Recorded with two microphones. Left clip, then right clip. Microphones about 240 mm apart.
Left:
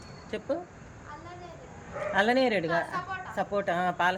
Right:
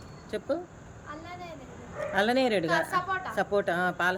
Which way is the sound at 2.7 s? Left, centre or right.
Right.